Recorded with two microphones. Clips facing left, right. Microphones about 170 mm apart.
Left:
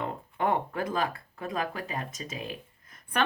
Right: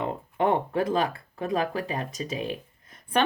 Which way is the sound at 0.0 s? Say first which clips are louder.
Right 4 dB; 25° right (ahead or behind).